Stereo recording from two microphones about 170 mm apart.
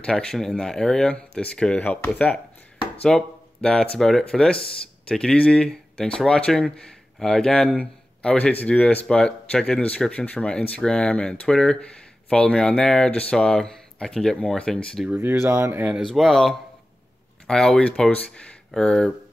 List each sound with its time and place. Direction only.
0.0 s speech: 5° left (ahead or behind)
15.0 s speech: 10° right (ahead or behind)
16.1 s speech: centre (ahead or behind)